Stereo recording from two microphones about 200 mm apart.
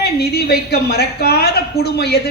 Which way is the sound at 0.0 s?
55° left (ahead or behind).